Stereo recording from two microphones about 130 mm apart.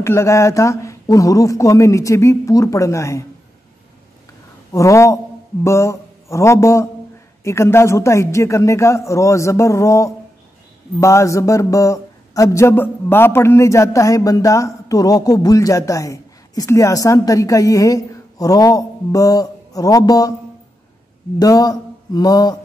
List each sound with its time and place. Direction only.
0.0 s a man's voice: 20° left (ahead or behind)
4.7 s a man's voice: 25° left (ahead or behind)
21.4 s a sound: 25° left (ahead or behind)